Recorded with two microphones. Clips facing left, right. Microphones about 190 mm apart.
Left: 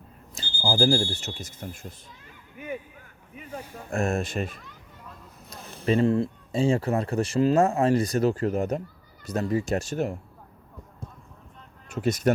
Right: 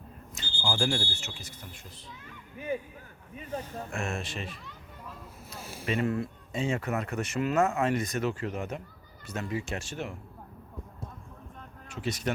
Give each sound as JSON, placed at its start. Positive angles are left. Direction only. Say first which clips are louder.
{"t": 0.3, "sound": "smoke detector", "louder": "left 6 dB", "side_deg": 35}
{"t": 1.1, "sound": "speech", "louder": "left 6 dB", "side_deg": 40}
{"t": 3.4, "sound": "speech", "louder": "right 2 dB", "side_deg": 10}
{"t": 3.9, "sound": "speech", "louder": "left 10 dB", "side_deg": 40}
{"t": 5.5, "sound": "a sound", "louder": "right 1 dB", "side_deg": -10}
{"t": 5.8, "sound": "speech", "louder": "left 7 dB", "side_deg": 30}
{"t": 11.9, "sound": "speech", "louder": "left 8 dB", "side_deg": 45}